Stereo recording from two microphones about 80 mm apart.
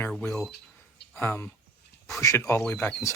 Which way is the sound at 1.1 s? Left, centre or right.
Left.